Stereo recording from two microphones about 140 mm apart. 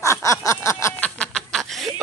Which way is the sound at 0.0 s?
20° left (ahead or behind).